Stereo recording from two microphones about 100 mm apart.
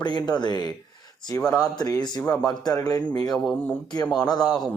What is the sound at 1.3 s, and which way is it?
Speech, 35° left (ahead or behind).